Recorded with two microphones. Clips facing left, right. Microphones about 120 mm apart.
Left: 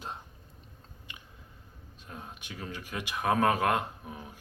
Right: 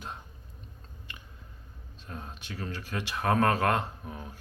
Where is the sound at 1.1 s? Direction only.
15° left (ahead or behind).